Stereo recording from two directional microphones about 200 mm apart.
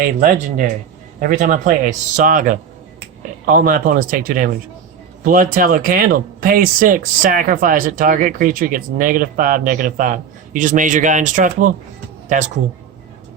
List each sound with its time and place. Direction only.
0.0 s speech: 45° right (ahead or behind)